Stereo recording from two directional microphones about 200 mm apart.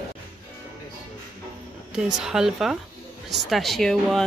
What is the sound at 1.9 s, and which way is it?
A woman's voice, 5° right (ahead or behind).